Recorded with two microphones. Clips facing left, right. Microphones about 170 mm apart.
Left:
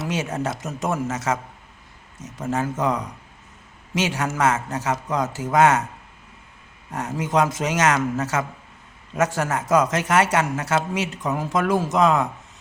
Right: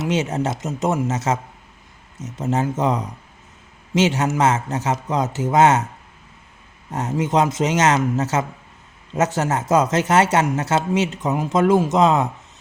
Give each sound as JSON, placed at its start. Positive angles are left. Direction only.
{"t": 0.0, "sound": "speech", "side_deg": -20}
{"t": 6.9, "sound": "speech", "side_deg": -25}